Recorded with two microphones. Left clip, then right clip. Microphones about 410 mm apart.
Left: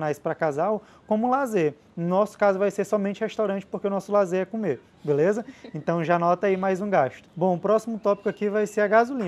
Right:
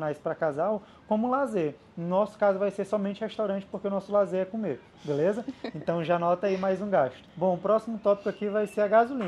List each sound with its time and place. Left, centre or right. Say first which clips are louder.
0.0 s speech: left 3 dB; left
2.0 s speech: left 3 dB; left